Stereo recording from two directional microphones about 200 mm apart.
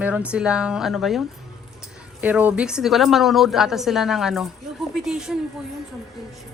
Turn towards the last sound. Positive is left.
turn(degrees=-5)  # may be behind; listen again after turning